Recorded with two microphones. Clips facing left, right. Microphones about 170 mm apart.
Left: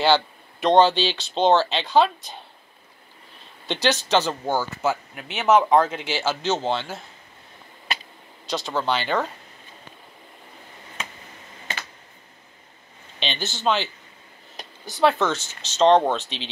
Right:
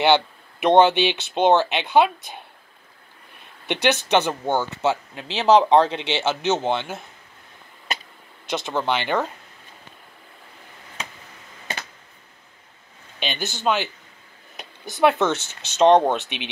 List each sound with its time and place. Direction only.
0.0 s a sound: 20° right (ahead or behind)
0.7 s speech: 20° right (ahead or behind)
3.6 s speech: 15° right (ahead or behind)
8.5 s speech: 20° right (ahead or behind)
13.2 s speech: 10° right (ahead or behind)
14.9 s speech: 20° right (ahead or behind)